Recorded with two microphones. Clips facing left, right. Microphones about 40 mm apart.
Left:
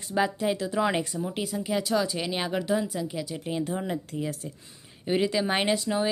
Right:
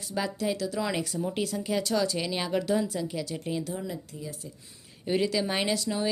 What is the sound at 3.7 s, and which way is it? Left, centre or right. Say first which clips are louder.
Speech: left 5 dB; left.